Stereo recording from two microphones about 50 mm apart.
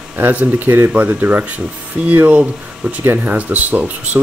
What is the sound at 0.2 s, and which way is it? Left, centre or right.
Speech, right.